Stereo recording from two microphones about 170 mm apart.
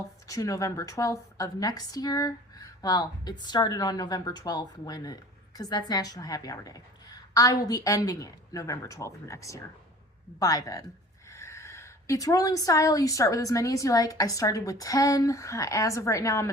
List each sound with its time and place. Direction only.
0.0 s a woman's voice: 20° left (ahead or behind)